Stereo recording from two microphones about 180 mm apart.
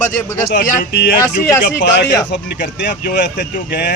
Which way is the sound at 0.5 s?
75° left (ahead or behind).